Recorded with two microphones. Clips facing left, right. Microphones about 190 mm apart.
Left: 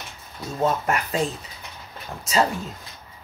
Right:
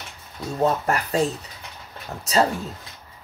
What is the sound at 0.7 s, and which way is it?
Speech, 35° right (ahead or behind).